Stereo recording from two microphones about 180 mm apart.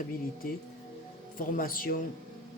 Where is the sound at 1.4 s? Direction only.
50° left (ahead or behind).